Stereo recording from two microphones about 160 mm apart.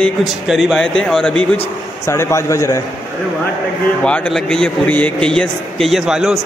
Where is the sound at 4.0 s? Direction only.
5° left (ahead or behind).